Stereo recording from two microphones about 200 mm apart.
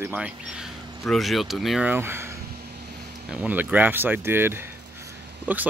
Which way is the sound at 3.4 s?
10° right (ahead or behind).